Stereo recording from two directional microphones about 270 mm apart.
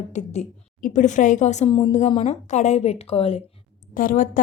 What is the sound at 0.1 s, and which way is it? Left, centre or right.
A woman's voice, left.